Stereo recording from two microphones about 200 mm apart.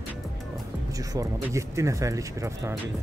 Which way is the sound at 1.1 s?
15° right (ahead or behind).